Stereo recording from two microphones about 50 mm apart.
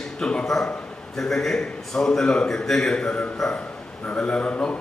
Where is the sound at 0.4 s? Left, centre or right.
Centre.